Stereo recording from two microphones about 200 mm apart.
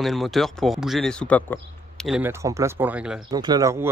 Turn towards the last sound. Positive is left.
turn(degrees=-15)  # may be behind; listen again after turning